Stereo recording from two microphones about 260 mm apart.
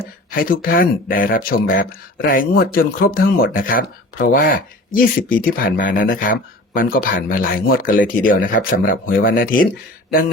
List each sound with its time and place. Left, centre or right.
0.0 s speech: left